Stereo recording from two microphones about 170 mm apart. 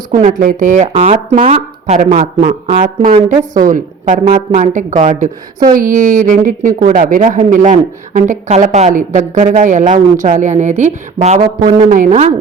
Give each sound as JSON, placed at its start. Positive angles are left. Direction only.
{"t": 0.1, "sound": "a woman's voice", "side_deg": -50}
{"t": 2.1, "sound": "speech", "side_deg": -30}
{"t": 3.7, "sound": "a woman's voice", "side_deg": -50}
{"t": 11.9, "sound": "a woman's voice", "side_deg": -50}